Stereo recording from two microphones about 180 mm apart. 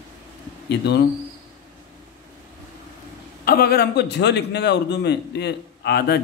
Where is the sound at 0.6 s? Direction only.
70° left (ahead or behind).